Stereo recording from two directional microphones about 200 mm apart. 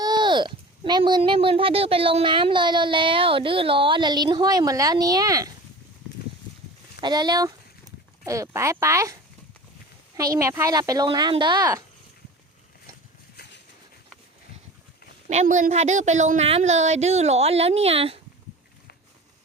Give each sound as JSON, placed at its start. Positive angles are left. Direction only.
{"t": 0.0, "sound": "speech", "side_deg": -20}
{"t": 7.0, "sound": "speech", "side_deg": -20}
{"t": 10.3, "sound": "speech", "side_deg": -15}
{"t": 13.3, "sound": "a sound", "side_deg": 55}
{"t": 15.3, "sound": "speech", "side_deg": -35}